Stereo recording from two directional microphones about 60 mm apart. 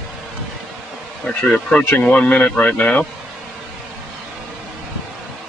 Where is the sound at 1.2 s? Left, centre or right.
Left.